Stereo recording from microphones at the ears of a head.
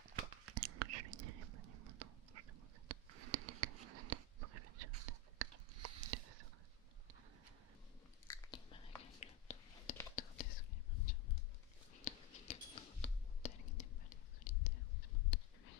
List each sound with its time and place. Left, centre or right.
0.0 s whispering: right
8.3 s whispering: left